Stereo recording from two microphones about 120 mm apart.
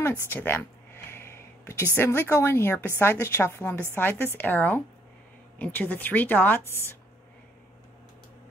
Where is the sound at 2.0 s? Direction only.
20° left (ahead or behind).